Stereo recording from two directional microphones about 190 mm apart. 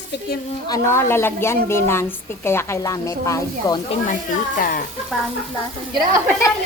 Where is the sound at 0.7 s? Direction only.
15° left (ahead or behind).